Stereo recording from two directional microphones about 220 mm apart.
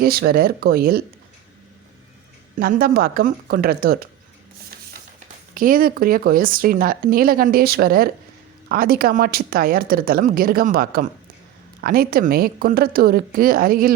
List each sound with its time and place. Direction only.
0.0 s a woman's voice: 45° right (ahead or behind)
2.6 s a woman's voice: 40° right (ahead or behind)
5.5 s speech: 40° right (ahead or behind)